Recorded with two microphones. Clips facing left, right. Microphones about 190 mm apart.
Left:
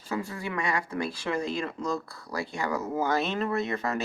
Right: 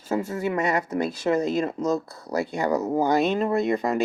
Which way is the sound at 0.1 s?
40° right (ahead or behind).